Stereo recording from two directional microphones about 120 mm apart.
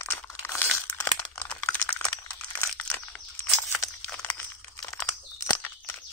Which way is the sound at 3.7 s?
20° left (ahead or behind).